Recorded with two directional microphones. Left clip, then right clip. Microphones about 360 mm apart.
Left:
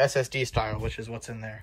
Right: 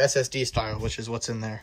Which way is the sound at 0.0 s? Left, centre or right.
Centre.